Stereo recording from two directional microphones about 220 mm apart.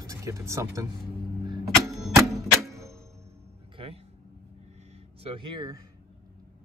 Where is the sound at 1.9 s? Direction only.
Centre (ahead or behind).